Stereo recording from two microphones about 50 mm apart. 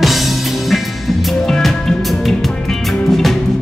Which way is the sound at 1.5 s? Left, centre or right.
Centre.